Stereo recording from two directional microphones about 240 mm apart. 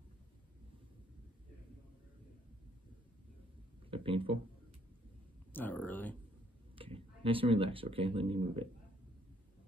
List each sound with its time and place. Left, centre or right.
3.9 s speech: right
5.5 s speech: centre
6.7 s speech: right